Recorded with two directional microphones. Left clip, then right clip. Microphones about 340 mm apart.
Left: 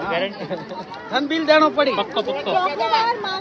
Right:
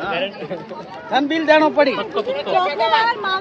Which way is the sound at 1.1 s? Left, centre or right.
Right.